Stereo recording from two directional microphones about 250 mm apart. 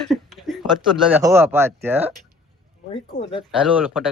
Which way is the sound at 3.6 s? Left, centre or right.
Centre.